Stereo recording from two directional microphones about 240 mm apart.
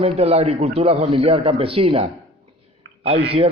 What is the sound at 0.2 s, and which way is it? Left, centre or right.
A man's voice, right.